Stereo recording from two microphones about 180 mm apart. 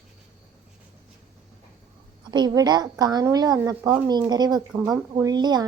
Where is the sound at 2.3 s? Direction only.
25° right (ahead or behind).